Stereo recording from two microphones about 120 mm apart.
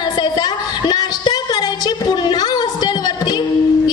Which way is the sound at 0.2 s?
35° left (ahead or behind).